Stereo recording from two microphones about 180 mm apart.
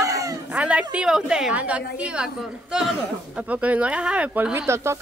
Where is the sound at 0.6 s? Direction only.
5° right (ahead or behind).